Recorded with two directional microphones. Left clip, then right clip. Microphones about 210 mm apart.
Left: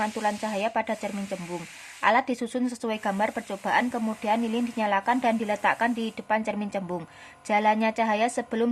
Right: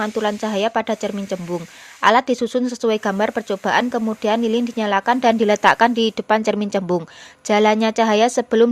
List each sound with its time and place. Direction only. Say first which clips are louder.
0.0 s speech: right 6 dB; 25° right (ahead or behind)